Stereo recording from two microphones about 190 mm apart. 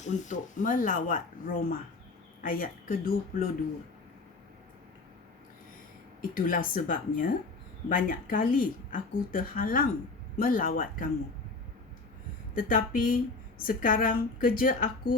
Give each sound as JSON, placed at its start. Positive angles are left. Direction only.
{"t": 0.0, "sound": "speech", "side_deg": 45}
{"t": 6.3, "sound": "speech", "side_deg": 45}
{"t": 12.5, "sound": "speech", "side_deg": 45}